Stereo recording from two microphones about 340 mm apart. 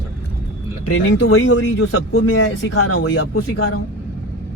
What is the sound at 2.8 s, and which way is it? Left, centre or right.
Speech, left.